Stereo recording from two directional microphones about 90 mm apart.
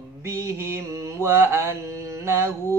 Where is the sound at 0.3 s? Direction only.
25° right (ahead or behind).